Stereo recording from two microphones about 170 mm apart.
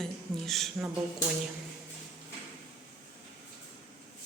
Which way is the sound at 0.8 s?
15° right (ahead or behind).